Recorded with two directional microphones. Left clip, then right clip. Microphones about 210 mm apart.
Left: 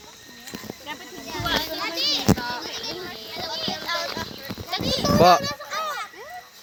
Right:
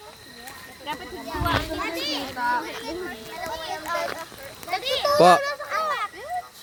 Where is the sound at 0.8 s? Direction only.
Centre (ahead or behind).